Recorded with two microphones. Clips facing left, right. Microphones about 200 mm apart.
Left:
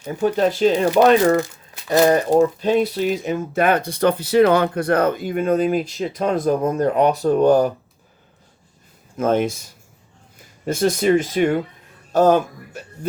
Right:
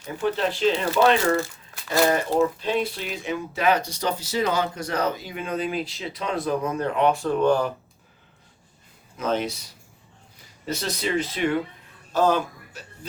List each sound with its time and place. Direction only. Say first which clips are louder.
0.3 s speech: left 7 dB; 45° left (ahead or behind)
1.2 s speech: left 6 dB; 15° left (ahead or behind)
2.6 s speech: left 8 dB; 45° left (ahead or behind)
9.1 s speech: left 7 dB; 50° left (ahead or behind)